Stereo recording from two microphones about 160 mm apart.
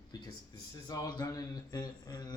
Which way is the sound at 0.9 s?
25° left (ahead or behind).